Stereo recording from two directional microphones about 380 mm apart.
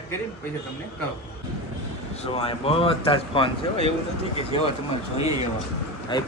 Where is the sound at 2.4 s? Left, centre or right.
Centre.